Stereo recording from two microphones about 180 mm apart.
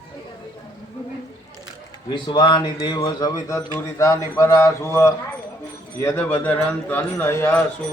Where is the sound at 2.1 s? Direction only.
25° left (ahead or behind).